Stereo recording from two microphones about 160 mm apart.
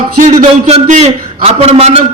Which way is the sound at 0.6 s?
40° right (ahead or behind).